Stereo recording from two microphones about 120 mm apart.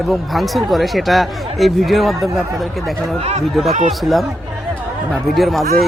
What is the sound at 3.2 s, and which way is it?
Speech, 60° right (ahead or behind).